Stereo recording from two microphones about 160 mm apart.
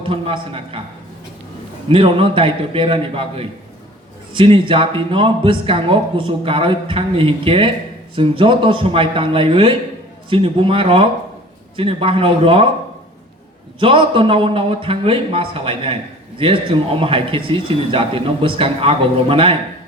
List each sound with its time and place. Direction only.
0.0 s speech: 35° right (ahead or behind)
1.9 s speech: 35° right (ahead or behind)
13.7 s speech: 35° right (ahead or behind)